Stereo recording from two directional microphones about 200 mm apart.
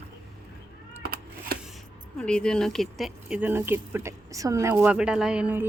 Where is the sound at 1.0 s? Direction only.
50° right (ahead or behind).